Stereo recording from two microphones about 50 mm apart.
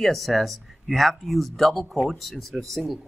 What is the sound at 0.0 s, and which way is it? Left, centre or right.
Speech, centre.